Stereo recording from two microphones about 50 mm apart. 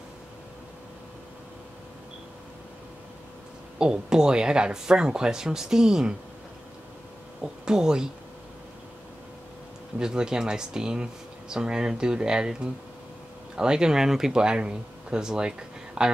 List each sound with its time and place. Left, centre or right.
3.7 s speech: centre
7.6 s speech: centre
9.9 s speech: centre
13.6 s speech: centre